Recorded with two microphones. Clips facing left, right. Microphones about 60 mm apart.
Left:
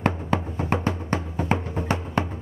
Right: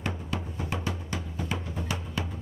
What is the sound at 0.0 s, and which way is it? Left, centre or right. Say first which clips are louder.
Music: left 9 dB; left.